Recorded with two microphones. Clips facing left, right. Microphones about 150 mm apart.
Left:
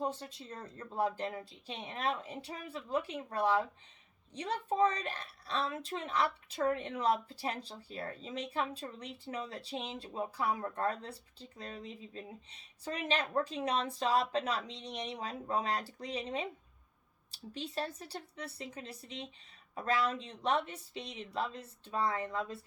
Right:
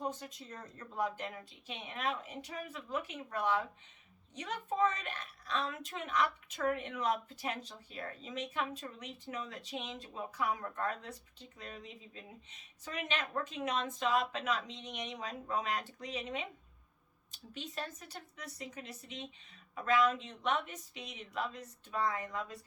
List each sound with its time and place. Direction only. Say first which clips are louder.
0.0 s a woman's voice: left 3 dB; 30° left (ahead or behind)